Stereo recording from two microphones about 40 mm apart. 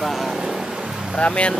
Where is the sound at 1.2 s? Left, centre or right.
Left.